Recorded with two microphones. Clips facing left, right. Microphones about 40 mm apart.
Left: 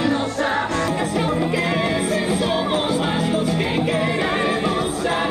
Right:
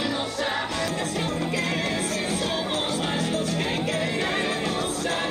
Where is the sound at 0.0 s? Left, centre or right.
Left.